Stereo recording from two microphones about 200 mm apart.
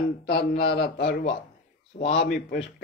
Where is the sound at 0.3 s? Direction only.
55° left (ahead or behind).